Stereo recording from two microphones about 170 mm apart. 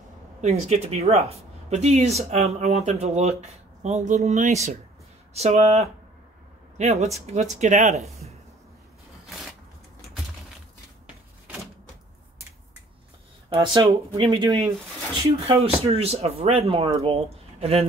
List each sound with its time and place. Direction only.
0.4 s speech: 40° right (ahead or behind)
13.5 s speech: 25° right (ahead or behind)